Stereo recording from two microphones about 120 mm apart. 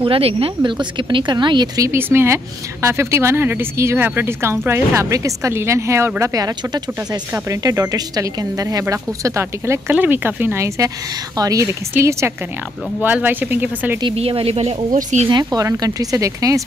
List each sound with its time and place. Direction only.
0.0 s speech: 50° right (ahead or behind)
0.6 s speech: 40° right (ahead or behind)
1.8 s speech: 20° right (ahead or behind)
14.1 s speech: 55° right (ahead or behind)
14.9 s speech: 90° right
15.2 s speech: 40° right (ahead or behind)